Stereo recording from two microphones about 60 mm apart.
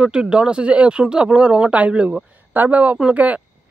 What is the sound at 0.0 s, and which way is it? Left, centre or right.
Speech, centre.